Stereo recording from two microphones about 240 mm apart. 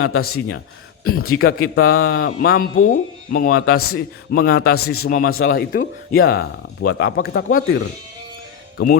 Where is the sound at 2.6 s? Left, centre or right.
Left.